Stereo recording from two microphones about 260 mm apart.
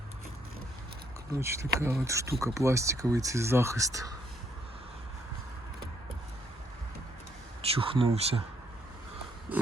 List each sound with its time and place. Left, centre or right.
1.3 s speech: centre
7.6 s speech: right
9.5 s a sound: centre